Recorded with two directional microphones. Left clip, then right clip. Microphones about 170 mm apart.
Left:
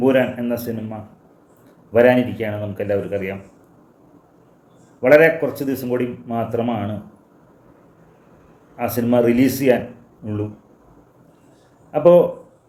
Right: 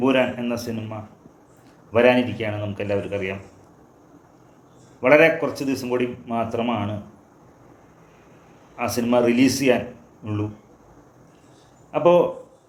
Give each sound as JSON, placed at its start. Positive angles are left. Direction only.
{"t": 0.0, "sound": "a man's voice", "side_deg": 20}
{"t": 1.9, "sound": "a man's voice", "side_deg": 20}
{"t": 4.9, "sound": "a man's voice", "side_deg": 20}
{"t": 8.7, "sound": "a man's voice", "side_deg": 20}
{"t": 11.9, "sound": "speech", "side_deg": 20}